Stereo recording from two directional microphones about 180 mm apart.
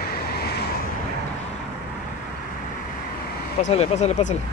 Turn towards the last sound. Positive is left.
turn(degrees=40)  # may be behind; listen again after turning